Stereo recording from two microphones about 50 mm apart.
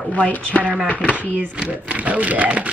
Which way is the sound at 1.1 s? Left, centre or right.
Right.